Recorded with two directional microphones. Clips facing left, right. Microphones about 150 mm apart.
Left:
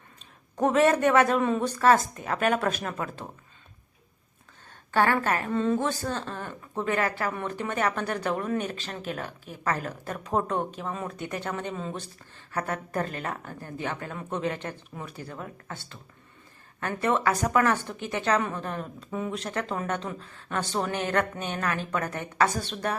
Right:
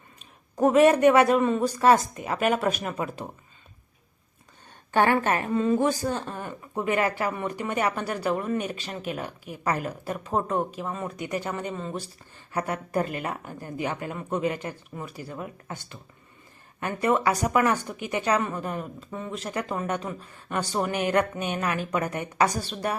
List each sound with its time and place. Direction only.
0.2 s a man's voice: 10° right (ahead or behind)
1.4 s speech: centre (ahead or behind)
1.8 s speech: 15° right (ahead or behind)
4.9 s a woman's voice: 20° right (ahead or behind)
5.5 s speech: 10° right (ahead or behind)
12.5 s speech: 15° right (ahead or behind)
19.1 s speech: 5° left (ahead or behind)
19.4 s speech: 10° right (ahead or behind)